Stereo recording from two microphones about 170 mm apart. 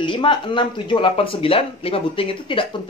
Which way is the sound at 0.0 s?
30° left (ahead or behind).